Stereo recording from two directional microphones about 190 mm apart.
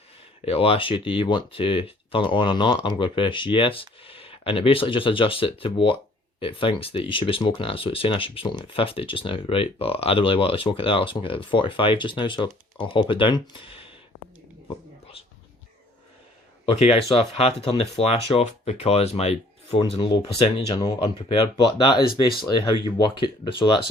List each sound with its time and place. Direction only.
0.4 s speech: 30° left (ahead or behind)
16.6 s speech: 30° left (ahead or behind)